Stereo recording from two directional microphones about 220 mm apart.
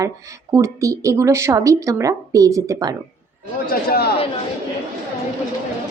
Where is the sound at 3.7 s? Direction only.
45° left (ahead or behind).